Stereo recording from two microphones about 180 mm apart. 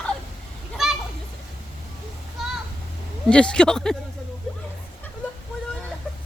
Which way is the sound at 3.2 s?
5° left (ahead or behind).